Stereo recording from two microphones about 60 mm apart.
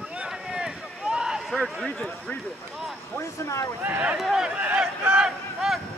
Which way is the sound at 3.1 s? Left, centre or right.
Left.